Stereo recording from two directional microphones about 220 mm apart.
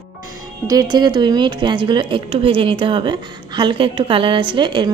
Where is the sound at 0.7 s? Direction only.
20° right (ahead or behind).